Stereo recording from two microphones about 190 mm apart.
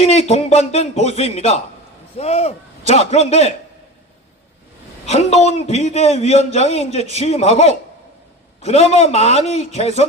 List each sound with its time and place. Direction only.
0.0 s speech: 35° left (ahead or behind)
5.0 s speech: 35° left (ahead or behind)